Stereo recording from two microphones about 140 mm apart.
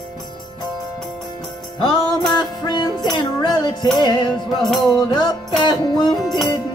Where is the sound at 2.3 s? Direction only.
30° left (ahead or behind).